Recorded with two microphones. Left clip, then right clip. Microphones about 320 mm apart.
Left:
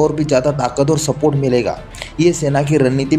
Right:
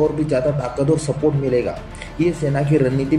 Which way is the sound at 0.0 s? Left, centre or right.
Left.